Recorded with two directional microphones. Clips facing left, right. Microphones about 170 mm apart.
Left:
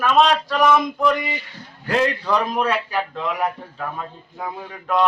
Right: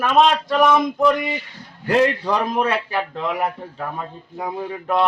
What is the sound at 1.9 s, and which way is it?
Speech, 20° right (ahead or behind).